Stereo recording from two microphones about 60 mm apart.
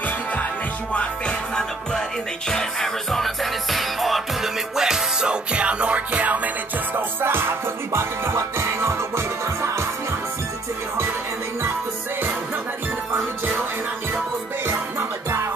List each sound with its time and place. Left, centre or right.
0.0 s music: left
0.9 s music: centre; by 9.8 s right
14.6 s music: right